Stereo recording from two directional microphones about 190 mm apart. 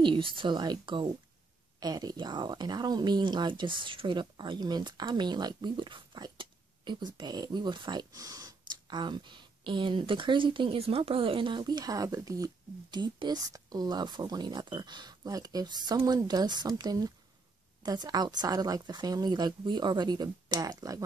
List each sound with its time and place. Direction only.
0.0 s speech: 25° right (ahead or behind)